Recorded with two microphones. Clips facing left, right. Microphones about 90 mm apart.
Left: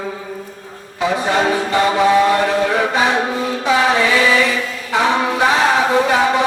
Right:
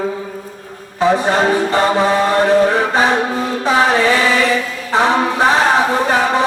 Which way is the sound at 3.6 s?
35° right (ahead or behind).